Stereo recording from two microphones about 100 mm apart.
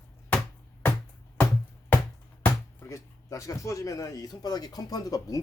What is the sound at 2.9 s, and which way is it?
Speech, 30° left (ahead or behind).